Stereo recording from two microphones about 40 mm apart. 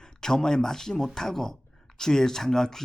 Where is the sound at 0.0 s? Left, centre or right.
Centre.